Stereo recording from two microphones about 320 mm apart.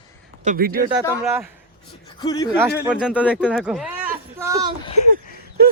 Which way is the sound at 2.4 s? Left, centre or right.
Centre.